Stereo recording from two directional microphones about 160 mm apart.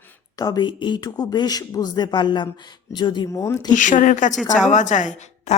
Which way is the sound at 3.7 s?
50° left (ahead or behind).